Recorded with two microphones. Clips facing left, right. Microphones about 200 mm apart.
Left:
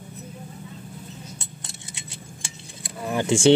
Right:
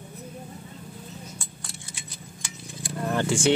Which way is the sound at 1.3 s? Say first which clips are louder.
Even; 20° left (ahead or behind).